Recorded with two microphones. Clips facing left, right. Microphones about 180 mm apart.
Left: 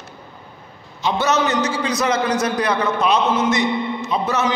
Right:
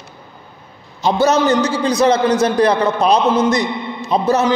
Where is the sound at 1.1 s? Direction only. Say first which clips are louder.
Right 5 dB; 35° right (ahead or behind).